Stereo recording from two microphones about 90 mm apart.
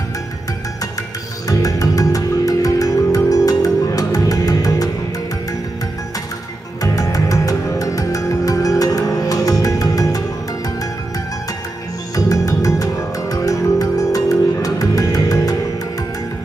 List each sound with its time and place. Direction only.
1.5 s music: 40° left (ahead or behind)
6.8 s music: 40° left (ahead or behind)
12.2 s music: 40° left (ahead or behind)